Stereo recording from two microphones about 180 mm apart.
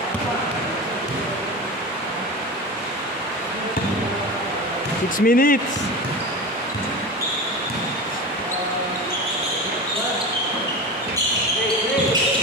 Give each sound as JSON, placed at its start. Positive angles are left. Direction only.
{"t": 5.2, "sound": "speech", "side_deg": 50}